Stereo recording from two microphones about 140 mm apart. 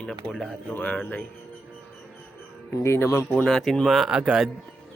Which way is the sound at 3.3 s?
Centre (ahead or behind).